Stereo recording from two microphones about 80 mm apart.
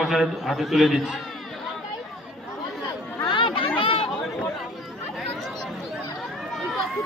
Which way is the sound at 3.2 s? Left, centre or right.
Left.